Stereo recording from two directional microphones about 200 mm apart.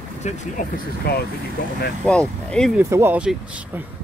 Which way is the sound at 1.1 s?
55° left (ahead or behind).